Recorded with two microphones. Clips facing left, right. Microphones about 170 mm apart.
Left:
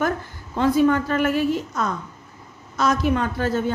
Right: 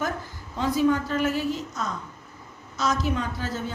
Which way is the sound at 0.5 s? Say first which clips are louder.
Left 5 dB; 60° left (ahead or behind).